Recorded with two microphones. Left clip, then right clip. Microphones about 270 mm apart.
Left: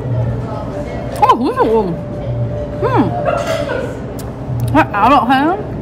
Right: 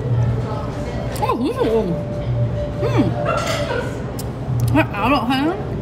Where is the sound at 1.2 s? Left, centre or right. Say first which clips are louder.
Left 9 dB; centre.